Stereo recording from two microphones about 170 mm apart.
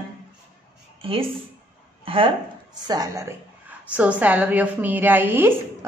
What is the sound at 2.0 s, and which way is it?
Speech, 30° right (ahead or behind).